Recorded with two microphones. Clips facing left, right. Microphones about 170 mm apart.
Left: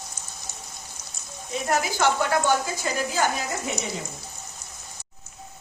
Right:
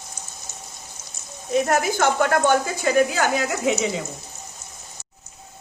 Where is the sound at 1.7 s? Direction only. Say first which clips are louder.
Left 2 dB; 55° right (ahead or behind); by 3.9 s 85° right.